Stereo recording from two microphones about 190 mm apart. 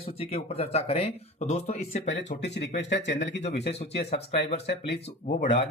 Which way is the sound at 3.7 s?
35° left (ahead or behind).